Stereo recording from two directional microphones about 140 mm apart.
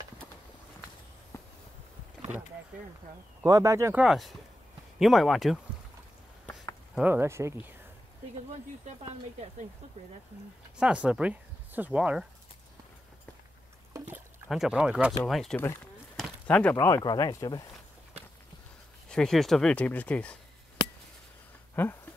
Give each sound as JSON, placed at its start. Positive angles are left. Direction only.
{"t": 1.3, "sound": "a sound", "side_deg": 20}
{"t": 3.4, "sound": "speech", "side_deg": -25}
{"t": 3.9, "sound": "speech", "side_deg": -5}
{"t": 7.0, "sound": "speech", "side_deg": -15}
{"t": 8.8, "sound": "speech", "side_deg": -55}
{"t": 10.8, "sound": "speech", "side_deg": -5}
{"t": 14.5, "sound": "speech", "side_deg": -5}
{"t": 16.2, "sound": "a sound", "side_deg": 10}
{"t": 16.7, "sound": "speech", "side_deg": 25}
{"t": 19.0, "sound": "speech", "side_deg": 5}
{"t": 21.8, "sound": "speech", "side_deg": 10}